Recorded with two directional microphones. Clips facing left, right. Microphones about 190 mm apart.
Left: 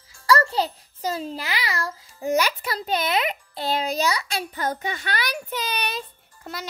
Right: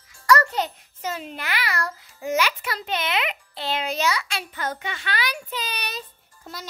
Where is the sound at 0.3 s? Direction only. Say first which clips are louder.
Even; 30° left (ahead or behind).